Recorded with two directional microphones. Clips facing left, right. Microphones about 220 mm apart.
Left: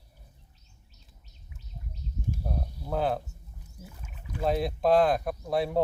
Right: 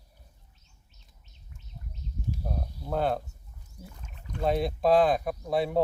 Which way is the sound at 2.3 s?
50° left (ahead or behind).